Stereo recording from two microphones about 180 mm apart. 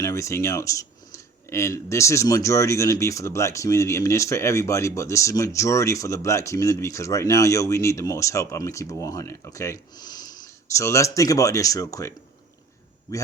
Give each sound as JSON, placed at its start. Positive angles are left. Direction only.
{"t": 0.0, "sound": "speech", "side_deg": 15}